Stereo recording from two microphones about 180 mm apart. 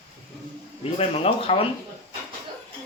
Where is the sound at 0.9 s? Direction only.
35° left (ahead or behind).